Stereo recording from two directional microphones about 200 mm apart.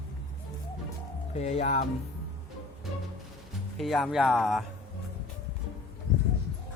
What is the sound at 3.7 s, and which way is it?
Speech, centre (ahead or behind).